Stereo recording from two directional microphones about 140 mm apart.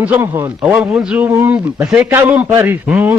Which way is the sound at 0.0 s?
15° right (ahead or behind).